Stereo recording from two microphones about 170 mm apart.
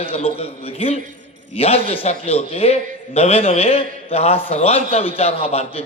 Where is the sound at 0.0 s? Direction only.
35° left (ahead or behind).